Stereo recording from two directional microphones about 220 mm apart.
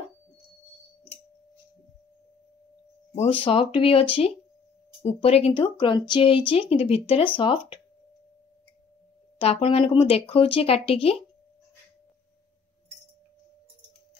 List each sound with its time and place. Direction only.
3.2 s speech: 25° left (ahead or behind)
9.4 s speech: 25° left (ahead or behind)